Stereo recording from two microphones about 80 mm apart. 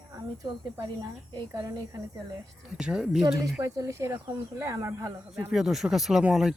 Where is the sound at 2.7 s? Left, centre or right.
Centre.